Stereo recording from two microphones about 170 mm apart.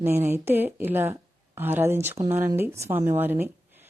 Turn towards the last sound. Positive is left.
turn(degrees=-10)  # may be behind; listen again after turning